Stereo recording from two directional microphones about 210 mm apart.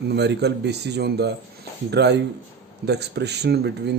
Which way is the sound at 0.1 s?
55° right (ahead or behind).